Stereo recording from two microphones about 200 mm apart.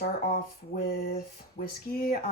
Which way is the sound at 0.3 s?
45° left (ahead or behind).